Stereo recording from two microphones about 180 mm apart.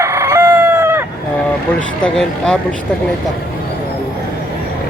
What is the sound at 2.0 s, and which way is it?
Speech, 5° left (ahead or behind).